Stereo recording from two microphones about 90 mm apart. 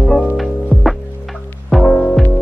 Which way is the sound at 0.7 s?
15° right (ahead or behind).